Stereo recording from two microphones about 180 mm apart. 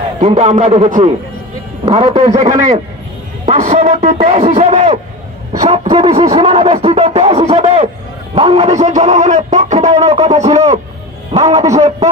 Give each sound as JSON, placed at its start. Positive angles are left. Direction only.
{"t": 0.2, "sound": "speech", "side_deg": -35}
{"t": 1.9, "sound": "speech", "side_deg": -30}